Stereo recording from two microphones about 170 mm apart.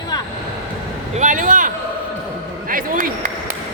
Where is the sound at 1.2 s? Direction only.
50° right (ahead or behind).